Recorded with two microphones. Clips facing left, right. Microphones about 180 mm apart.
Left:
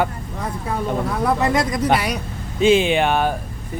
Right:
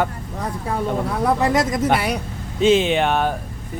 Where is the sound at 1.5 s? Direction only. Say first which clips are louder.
Right 1 dB; 45° right (ahead or behind).